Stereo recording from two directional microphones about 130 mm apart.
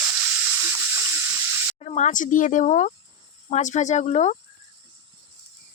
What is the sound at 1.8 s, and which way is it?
Speech, 60° left (ahead or behind).